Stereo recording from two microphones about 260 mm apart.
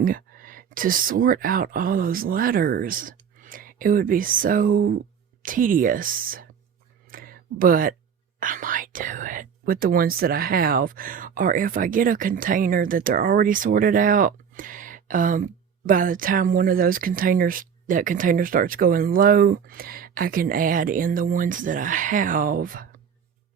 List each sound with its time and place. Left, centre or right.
0.0 s speech: right
7.1 s a sound: right
8.4 s speech: right